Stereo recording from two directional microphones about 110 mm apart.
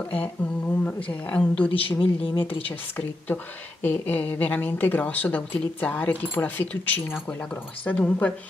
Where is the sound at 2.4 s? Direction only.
15° left (ahead or behind).